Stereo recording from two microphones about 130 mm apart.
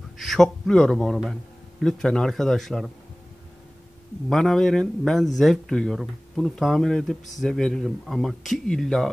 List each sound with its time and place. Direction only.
0.2 s speech: 5° left (ahead or behind)
4.3 s speech: centre (ahead or behind)